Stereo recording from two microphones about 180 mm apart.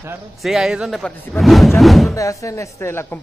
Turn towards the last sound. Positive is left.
turn(degrees=15)  # may be behind; listen again after turning